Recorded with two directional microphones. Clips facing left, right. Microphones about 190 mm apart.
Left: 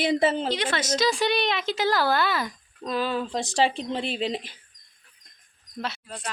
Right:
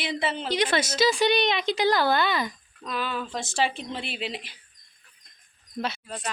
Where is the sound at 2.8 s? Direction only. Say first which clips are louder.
Left 4 dB; 35° left (ahead or behind).